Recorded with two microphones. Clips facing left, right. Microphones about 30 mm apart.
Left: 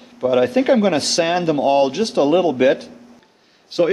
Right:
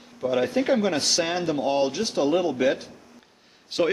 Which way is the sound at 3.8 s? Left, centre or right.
Centre.